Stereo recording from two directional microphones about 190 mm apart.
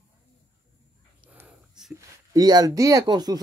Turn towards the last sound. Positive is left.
turn(degrees=-20)  # may be behind; listen again after turning